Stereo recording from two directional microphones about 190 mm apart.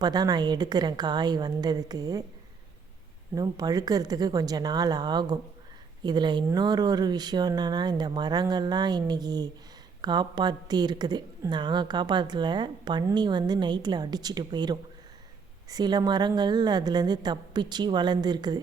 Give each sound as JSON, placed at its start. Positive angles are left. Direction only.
{"t": 0.0, "sound": "a woman's voice", "side_deg": -20}
{"t": 3.3, "sound": "a woman's voice", "side_deg": -20}